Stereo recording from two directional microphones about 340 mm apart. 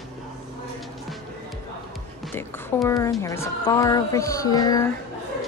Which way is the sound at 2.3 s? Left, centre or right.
Centre.